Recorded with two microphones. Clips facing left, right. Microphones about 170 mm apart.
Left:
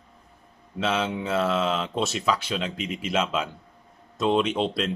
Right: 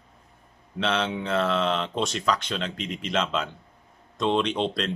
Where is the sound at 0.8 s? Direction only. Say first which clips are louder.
Even; 5° left (ahead or behind).